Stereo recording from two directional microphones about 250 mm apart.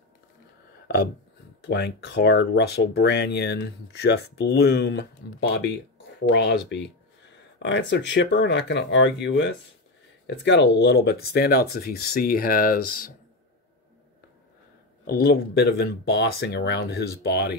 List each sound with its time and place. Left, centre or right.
1.6 s speech: left
6.2 s speech: left
15.0 s speech: left